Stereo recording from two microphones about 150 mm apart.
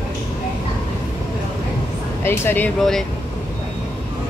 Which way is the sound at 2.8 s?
Centre (ahead or behind).